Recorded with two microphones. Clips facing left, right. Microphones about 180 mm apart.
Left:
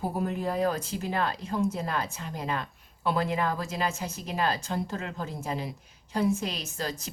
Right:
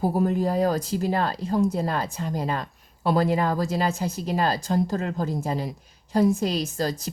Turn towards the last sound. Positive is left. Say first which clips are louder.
# right 8 dB
turn(degrees=-35)  # may be behind; listen again after turning